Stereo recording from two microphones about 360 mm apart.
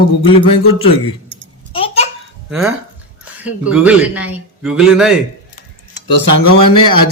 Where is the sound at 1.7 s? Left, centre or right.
Centre.